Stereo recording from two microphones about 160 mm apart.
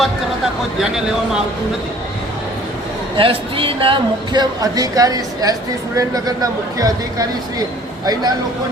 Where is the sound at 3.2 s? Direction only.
35° right (ahead or behind).